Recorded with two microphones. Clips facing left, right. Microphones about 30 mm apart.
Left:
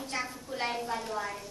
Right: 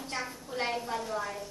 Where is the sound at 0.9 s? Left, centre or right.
Centre.